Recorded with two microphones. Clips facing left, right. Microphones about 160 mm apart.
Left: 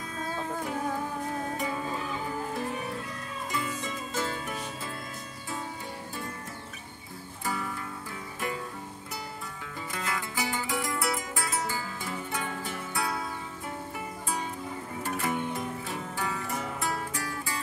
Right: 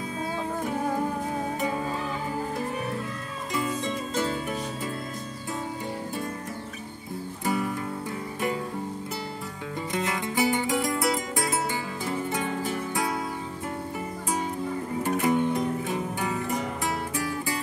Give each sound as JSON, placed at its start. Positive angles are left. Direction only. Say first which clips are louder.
{"t": 7.4, "sound": "music", "louder": "right 6 dB", "side_deg": -20}
{"t": 9.9, "sound": "music", "louder": "right 6 dB", "side_deg": -25}
{"t": 15.0, "sound": "music", "louder": "right 7 dB", "side_deg": -15}